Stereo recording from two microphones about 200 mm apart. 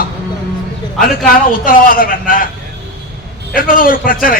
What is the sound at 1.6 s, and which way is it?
Speech, 45° left (ahead or behind).